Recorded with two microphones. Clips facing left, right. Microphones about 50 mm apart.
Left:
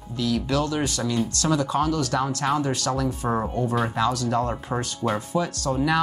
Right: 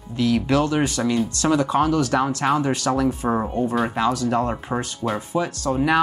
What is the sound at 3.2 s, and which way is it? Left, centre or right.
Speech, centre.